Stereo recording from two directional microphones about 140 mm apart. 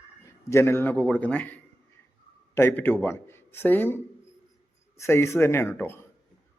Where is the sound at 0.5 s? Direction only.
15° left (ahead or behind).